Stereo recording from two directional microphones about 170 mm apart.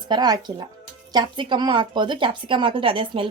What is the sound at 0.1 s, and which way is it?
Speech, 25° right (ahead or behind).